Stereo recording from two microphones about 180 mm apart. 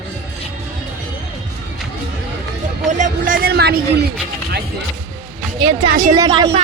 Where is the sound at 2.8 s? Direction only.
45° right (ahead or behind); by 4.0 s 65° right (ahead or behind).